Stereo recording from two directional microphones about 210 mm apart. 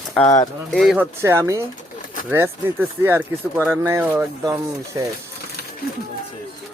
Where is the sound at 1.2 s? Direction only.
15° right (ahead or behind).